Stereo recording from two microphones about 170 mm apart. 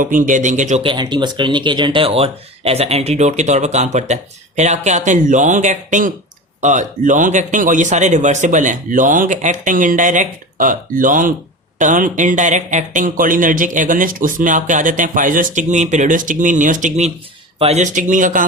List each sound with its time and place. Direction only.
0.0 s speech: 50° right (ahead or behind)
0.8 s speech: 30° right (ahead or behind); by 18.4 s 50° right (ahead or behind)